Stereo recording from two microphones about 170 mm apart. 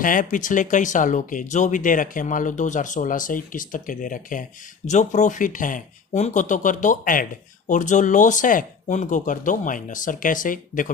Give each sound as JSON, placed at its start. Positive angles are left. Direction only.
{"t": 0.0, "sound": "speech", "side_deg": 50}